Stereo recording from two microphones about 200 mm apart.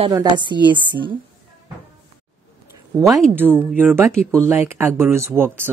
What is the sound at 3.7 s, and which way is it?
Speech, 10° right (ahead or behind).